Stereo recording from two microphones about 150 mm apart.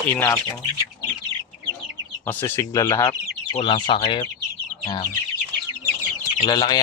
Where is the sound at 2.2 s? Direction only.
15° left (ahead or behind); by 4.3 s 30° left (ahead or behind).